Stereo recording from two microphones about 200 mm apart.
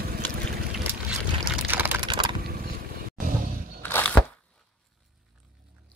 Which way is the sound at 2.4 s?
50° right (ahead or behind).